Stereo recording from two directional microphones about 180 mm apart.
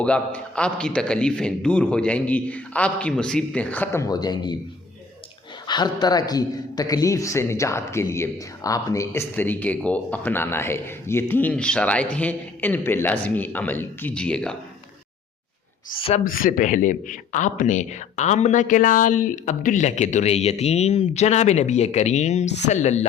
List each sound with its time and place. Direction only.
0.0 s a man's voice: 5° left (ahead or behind)
4.1 s speech: 20° left (ahead or behind)
5.6 s a man's voice: 25° left (ahead or behind); by 14.5 s 5° left (ahead or behind)
16.0 s speech: 35° left (ahead or behind)
16.2 s speech: 50° left (ahead or behind)